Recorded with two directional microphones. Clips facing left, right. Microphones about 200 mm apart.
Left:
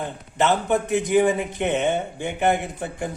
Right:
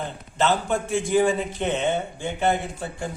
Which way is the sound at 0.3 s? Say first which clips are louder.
Left 2 dB; 15° left (ahead or behind).